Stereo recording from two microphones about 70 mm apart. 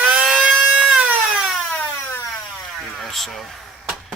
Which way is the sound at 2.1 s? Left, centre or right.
Left.